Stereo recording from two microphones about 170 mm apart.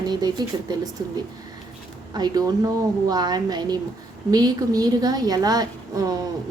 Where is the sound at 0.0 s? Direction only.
25° right (ahead or behind).